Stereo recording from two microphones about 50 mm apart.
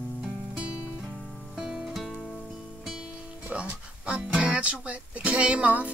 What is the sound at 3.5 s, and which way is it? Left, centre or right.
Speech, right.